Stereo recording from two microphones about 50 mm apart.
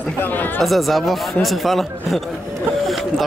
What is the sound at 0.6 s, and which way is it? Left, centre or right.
Speech, centre.